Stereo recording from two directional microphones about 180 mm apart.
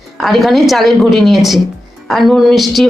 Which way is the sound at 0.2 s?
Centre (ahead or behind).